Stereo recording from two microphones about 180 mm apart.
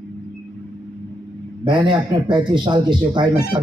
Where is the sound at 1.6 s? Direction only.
25° right (ahead or behind).